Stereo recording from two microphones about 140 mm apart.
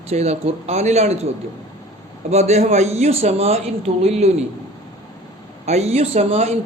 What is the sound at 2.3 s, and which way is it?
Speech, 50° right (ahead or behind).